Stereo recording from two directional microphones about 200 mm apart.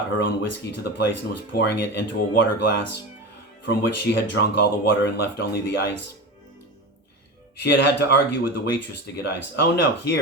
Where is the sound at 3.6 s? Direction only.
60° left (ahead or behind).